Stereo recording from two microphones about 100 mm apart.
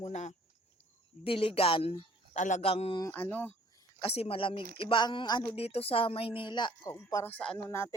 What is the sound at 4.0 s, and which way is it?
A woman's voice, 75° left (ahead or behind).